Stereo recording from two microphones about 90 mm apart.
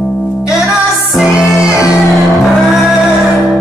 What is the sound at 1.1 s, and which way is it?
Music, 5° right (ahead or behind).